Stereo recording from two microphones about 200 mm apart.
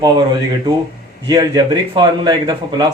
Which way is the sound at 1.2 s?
20° right (ahead or behind).